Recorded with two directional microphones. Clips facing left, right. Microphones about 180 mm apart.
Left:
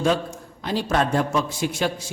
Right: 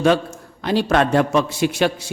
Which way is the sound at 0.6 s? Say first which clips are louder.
Right 5 dB; 70° right (ahead or behind).